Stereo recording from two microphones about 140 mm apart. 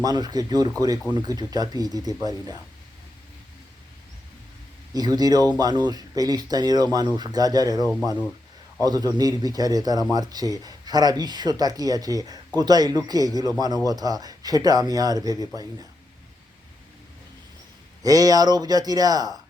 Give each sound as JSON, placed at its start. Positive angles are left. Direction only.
{"t": 0.0, "sound": "speech", "side_deg": -30}
{"t": 4.9, "sound": "speech", "side_deg": -30}
{"t": 18.0, "sound": "speech", "side_deg": -25}